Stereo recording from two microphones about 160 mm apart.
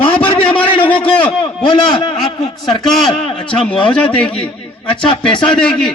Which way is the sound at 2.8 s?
Centre (ahead or behind).